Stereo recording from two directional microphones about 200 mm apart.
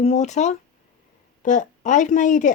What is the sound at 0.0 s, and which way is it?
Speech, 35° left (ahead or behind).